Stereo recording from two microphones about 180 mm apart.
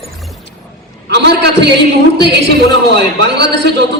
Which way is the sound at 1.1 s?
70° right (ahead or behind).